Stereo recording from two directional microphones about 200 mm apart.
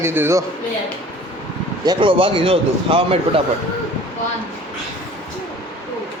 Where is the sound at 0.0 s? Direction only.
10° right (ahead or behind).